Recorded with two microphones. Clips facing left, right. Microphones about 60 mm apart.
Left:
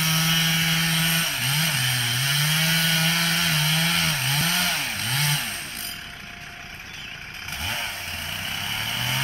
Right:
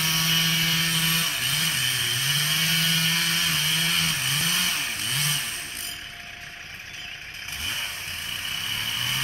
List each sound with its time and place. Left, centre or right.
0.0 s vehicle: left
8.5 s vehicle: left